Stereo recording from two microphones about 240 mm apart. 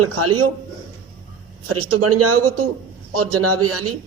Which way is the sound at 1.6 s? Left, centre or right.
Right.